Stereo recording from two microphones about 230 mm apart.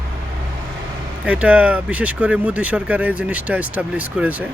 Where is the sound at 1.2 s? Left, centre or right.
Centre.